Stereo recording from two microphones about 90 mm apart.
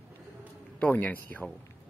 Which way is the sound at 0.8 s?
20° left (ahead or behind).